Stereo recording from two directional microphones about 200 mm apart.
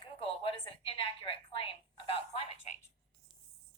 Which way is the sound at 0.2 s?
25° left (ahead or behind).